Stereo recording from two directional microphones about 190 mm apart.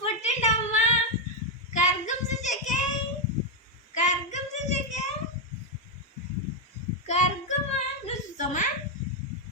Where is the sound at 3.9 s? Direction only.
40° left (ahead or behind).